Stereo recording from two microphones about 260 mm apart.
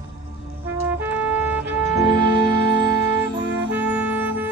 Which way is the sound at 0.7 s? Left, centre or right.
Centre.